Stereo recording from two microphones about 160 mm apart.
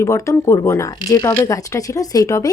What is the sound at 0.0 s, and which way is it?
Speech, 20° left (ahead or behind).